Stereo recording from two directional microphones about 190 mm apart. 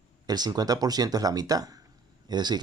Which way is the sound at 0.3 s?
20° right (ahead or behind).